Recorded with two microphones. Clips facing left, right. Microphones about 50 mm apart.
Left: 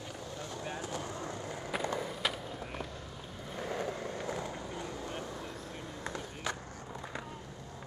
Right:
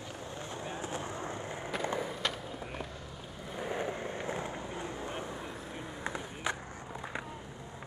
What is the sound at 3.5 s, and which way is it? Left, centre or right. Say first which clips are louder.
Vehicle: right 1 dB; centre.